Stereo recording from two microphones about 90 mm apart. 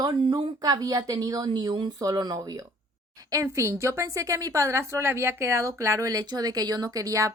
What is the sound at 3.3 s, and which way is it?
A woman's voice, 35° right (ahead or behind).